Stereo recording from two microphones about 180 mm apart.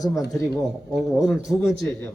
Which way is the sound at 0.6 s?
Centre (ahead or behind).